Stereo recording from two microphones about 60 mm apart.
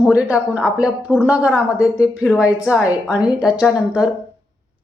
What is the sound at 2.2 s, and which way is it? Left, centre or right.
A woman's voice, centre.